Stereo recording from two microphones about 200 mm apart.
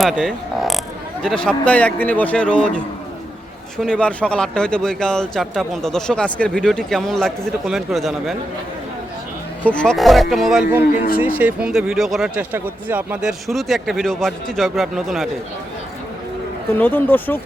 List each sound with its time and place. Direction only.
0.0 s a man's voice: centre (ahead or behind)
9.6 s speech: 5° left (ahead or behind)
16.7 s a man's voice: 10° left (ahead or behind)